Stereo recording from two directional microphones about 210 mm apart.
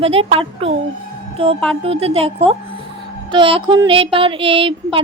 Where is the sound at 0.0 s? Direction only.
30° right (ahead or behind).